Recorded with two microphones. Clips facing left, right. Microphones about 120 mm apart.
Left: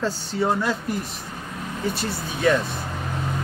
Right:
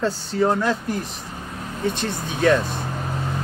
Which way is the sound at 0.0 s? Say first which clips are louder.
Right 3 dB; centre (ahead or behind).